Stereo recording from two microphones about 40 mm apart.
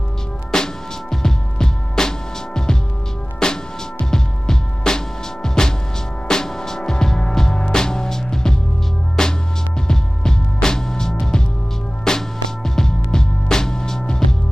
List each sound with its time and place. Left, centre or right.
0.5 s music: centre